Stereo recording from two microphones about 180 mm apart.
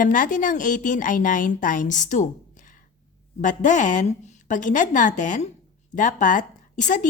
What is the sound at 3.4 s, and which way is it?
A woman's voice, 45° left (ahead or behind).